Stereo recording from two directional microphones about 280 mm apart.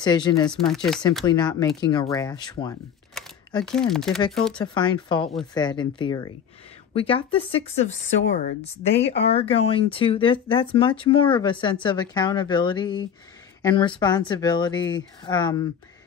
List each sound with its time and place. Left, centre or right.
0.0 s a woman's voice: centre
0.5 s speech: centre
1.2 s a woman's voice: centre
3.2 s speech: centre
4.7 s a woman's voice: centre; by 9.1 s left
9.1 s a woman's voice: left